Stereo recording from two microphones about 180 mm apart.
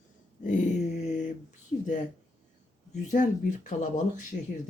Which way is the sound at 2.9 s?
45° left (ahead or behind).